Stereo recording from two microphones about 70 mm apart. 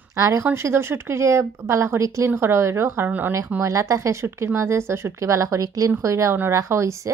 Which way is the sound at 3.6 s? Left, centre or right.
Right.